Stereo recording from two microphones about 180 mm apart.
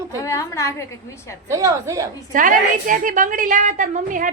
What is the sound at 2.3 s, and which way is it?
A woman's voice, 50° right (ahead or behind).